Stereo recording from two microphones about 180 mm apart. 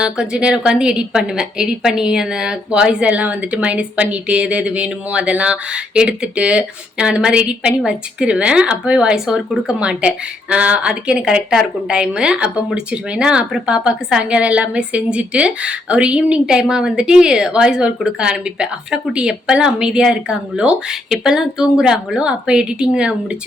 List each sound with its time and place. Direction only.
0.0 s a woman's voice: 5° right (ahead or behind)